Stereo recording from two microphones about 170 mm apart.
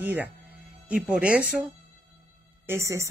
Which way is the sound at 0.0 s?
10° right (ahead or behind).